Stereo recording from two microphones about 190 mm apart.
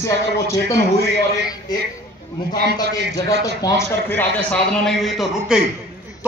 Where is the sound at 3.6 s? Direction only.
15° left (ahead or behind).